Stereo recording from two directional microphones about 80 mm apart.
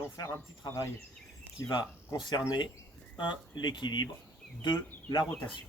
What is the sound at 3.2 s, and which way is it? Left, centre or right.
Speech, left.